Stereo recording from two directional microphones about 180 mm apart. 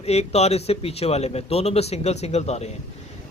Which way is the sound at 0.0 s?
35° left (ahead or behind).